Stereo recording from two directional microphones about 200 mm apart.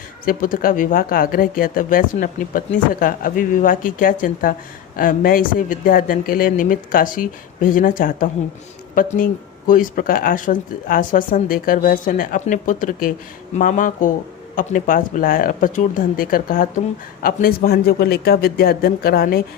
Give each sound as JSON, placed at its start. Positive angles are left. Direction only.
{"t": 0.3, "sound": "speech", "side_deg": 45}